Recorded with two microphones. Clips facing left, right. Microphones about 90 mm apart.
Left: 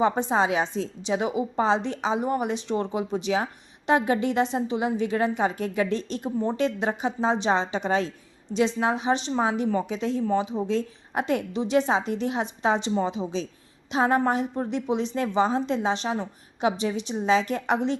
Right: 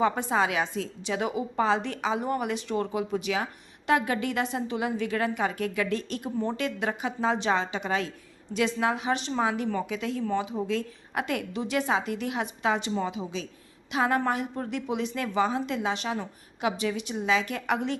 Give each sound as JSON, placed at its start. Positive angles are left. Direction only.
{"t": 0.0, "sound": "a woman's voice", "side_deg": 25}